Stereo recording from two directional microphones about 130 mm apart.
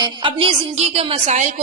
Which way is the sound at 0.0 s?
40° right (ahead or behind).